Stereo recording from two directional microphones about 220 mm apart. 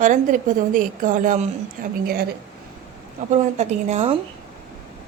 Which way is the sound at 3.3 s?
30° right (ahead or behind).